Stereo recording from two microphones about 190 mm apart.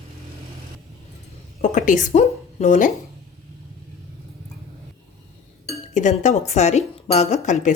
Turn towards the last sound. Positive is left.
turn(degrees=40)  # may be behind; listen again after turning